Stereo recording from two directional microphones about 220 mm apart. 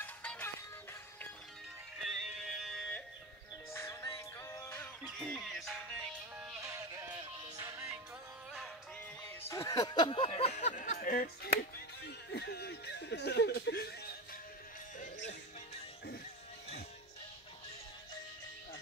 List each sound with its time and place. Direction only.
0.0 s music: 5° left (ahead or behind)
2.0 s music: centre (ahead or behind)
3.7 s music: 10° left (ahead or behind); by 8.0 s 10° right (ahead or behind)
9.4 s speech: 15° left (ahead or behind); by 14.1 s 45° left (ahead or behind)